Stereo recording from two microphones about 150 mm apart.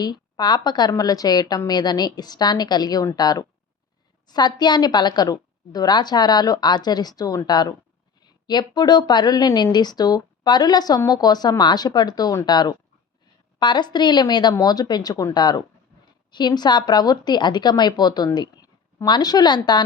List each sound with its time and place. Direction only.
0.0 s a woman's voice: 30° left (ahead or behind)